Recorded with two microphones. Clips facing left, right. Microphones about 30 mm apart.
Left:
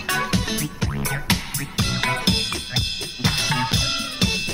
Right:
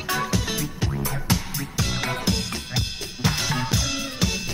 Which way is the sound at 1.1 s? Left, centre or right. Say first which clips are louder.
Left 2 dB; left.